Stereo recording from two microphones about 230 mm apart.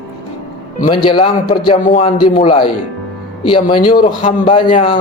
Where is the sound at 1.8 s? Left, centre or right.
Left.